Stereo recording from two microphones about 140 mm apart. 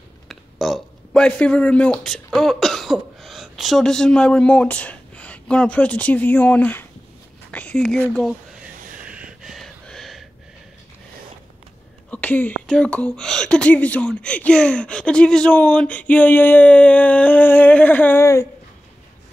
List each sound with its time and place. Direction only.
0.3 s speech: centre (ahead or behind)
9.0 s a sound: 10° right (ahead or behind)
12.1 s speech: 10° left (ahead or behind)